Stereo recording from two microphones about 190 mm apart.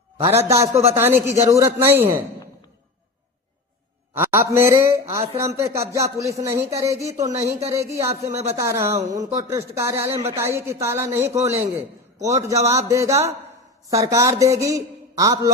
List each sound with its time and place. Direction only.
0.2 s speech: 30° right (ahead or behind)
0.9 s speech: 10° right (ahead or behind)
4.1 s speech: 10° right (ahead or behind)
8.3 s speech: 35° right (ahead or behind)
8.5 s speech: 15° right (ahead or behind)